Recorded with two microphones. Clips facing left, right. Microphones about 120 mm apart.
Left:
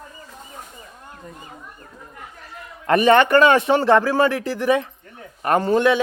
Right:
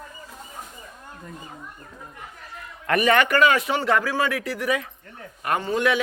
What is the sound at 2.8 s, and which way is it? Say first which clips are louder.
A man's voice: left 5 dB; 30° left (ahead or behind).